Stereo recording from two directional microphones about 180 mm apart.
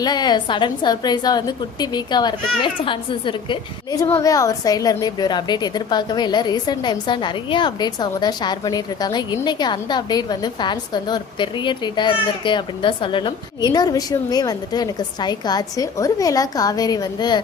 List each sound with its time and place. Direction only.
0.0 s a woman's voice: 25° left (ahead or behind)
4.0 s a woman's voice: 15° left (ahead or behind)